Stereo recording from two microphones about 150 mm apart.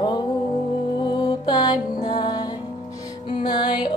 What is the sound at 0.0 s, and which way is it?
Music, 30° left (ahead or behind).